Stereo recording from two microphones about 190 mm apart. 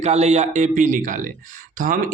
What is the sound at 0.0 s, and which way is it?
Speech, 35° right (ahead or behind).